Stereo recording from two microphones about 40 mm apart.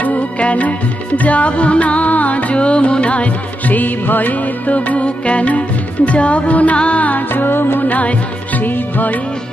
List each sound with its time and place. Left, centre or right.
0.0 s music: left
3.6 s music: left
7.9 s music: left